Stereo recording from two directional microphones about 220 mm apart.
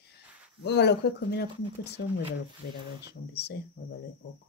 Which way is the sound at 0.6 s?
50° left (ahead or behind).